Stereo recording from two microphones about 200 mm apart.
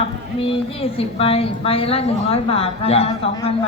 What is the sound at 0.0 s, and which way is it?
A woman's voice, 25° left (ahead or behind).